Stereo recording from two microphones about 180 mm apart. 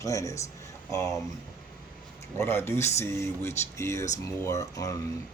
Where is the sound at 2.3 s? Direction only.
15° left (ahead or behind).